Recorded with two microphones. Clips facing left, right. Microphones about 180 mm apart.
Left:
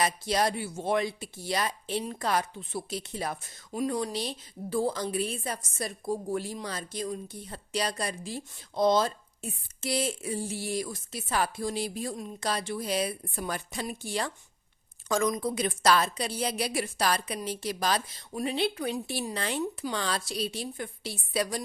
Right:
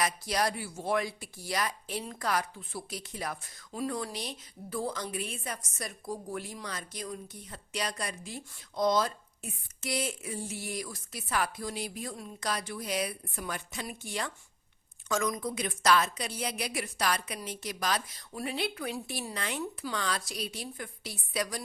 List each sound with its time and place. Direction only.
0.0 s a woman's voice: 25° left (ahead or behind)